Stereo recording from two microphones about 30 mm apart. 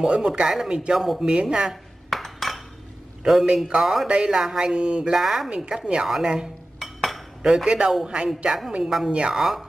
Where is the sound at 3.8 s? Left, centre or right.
Centre.